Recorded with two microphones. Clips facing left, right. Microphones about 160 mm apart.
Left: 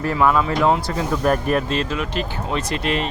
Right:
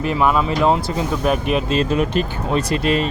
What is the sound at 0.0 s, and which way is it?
Speech, 20° right (ahead or behind).